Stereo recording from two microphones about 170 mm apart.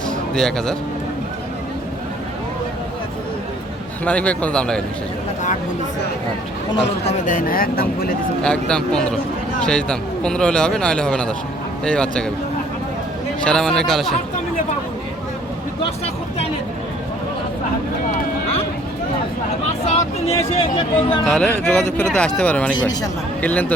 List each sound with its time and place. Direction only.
0.3 s speech: 5° left (ahead or behind)
4.0 s speech: 5° left (ahead or behind)
7.0 s speech: 45° left (ahead or behind); by 8.1 s 60° left (ahead or behind)
8.4 s speech: 5° left (ahead or behind)
13.4 s speech: 5° left (ahead or behind)
19.9 s speech: 40° left (ahead or behind)
21.2 s speech: 5° left (ahead or behind)